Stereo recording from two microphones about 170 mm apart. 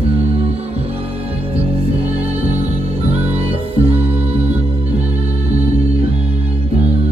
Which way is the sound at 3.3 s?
35° right (ahead or behind).